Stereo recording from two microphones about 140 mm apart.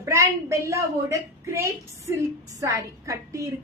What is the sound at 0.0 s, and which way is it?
A woman's voice, 20° right (ahead or behind).